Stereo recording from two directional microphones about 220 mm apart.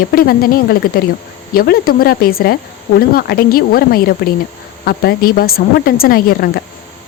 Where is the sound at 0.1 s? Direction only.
40° left (ahead or behind).